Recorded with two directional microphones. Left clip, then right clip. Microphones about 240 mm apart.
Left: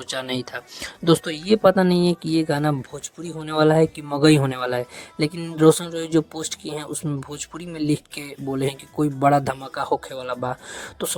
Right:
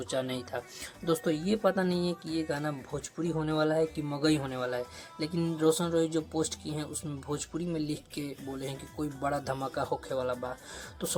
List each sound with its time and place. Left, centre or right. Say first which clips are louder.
0.1 s speech: left 7 dB; left